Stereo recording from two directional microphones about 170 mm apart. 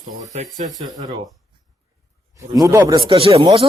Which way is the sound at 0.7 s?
20° right (ahead or behind).